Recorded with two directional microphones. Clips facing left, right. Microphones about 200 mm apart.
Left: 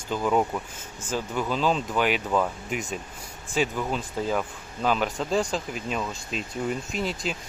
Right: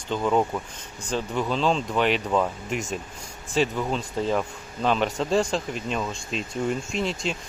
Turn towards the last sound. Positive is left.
turn(degrees=0)  # may be behind; listen again after turning